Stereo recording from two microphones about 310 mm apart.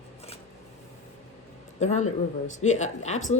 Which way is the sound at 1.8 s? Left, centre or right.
Left.